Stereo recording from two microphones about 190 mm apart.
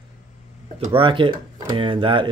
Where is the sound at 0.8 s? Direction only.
25° right (ahead or behind).